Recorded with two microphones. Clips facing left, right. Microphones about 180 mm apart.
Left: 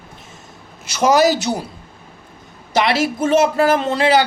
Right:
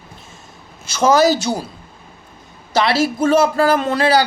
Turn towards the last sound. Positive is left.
turn(degrees=20)  # may be behind; listen again after turning